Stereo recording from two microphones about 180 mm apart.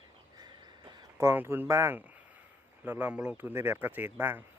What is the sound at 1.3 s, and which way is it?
Speech, 10° right (ahead or behind).